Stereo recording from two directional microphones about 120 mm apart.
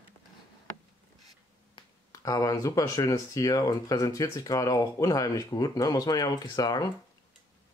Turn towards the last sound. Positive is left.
turn(degrees=35)  # may be behind; listen again after turning